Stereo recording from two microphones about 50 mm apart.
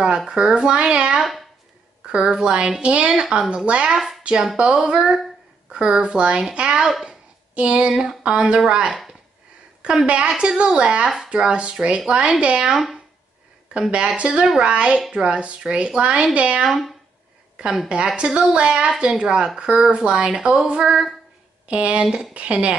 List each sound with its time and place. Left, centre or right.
0.3 s a woman's voice: centre
3.9 s speech: centre
4.2 s a woman's voice: centre
7.1 s a sound: right
7.9 s a woman's voice: centre
10.0 s a woman's voice: centre
12.7 s speech: centre
13.7 s a woman's voice: centre
16.6 s a woman's voice: centre
17.8 s a woman's voice: right
21.6 s a woman's voice: right